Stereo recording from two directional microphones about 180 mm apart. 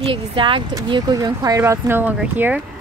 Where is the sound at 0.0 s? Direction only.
30° right (ahead or behind); by 2.6 s 10° right (ahead or behind).